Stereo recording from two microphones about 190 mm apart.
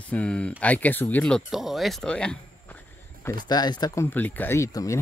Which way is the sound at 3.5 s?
20° left (ahead or behind).